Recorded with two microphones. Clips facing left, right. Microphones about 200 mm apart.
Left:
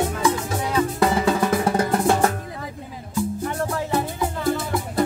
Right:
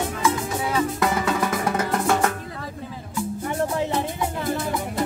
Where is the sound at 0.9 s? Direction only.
30° left (ahead or behind).